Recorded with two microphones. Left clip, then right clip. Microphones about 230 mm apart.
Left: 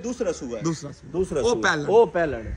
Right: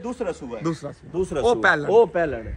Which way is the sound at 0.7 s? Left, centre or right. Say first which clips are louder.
Right 1 dB; centre.